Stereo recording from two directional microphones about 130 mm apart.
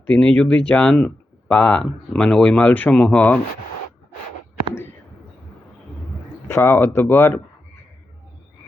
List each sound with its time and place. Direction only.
0.1 s speech: 5° left (ahead or behind)
6.5 s speech: 20° left (ahead or behind)